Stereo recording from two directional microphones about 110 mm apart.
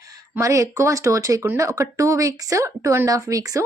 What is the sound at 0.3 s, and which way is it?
Speech, 30° right (ahead or behind).